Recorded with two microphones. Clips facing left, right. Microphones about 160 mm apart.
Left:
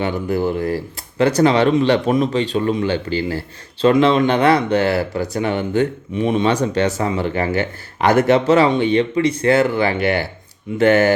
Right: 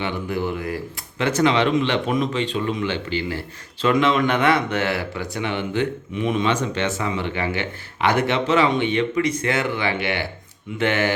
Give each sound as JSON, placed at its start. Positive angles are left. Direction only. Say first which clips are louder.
{"t": 0.0, "sound": "speech", "louder": "left 5 dB", "side_deg": 40}